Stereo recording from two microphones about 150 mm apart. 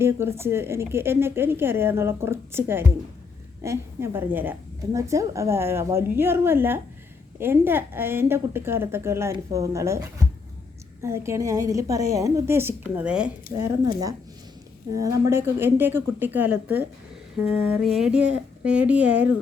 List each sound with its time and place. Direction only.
0.0 s a woman's voice: 15° right (ahead or behind)
14.9 s a woman's voice: 20° right (ahead or behind)
17.4 s a sound: centre (ahead or behind)
17.7 s a woman's voice: centre (ahead or behind)